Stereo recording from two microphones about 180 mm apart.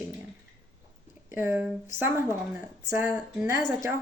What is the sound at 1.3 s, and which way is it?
A woman's voice, 10° right (ahead or behind).